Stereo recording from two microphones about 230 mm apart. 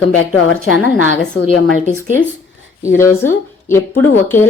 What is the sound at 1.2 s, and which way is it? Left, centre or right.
Speech, left.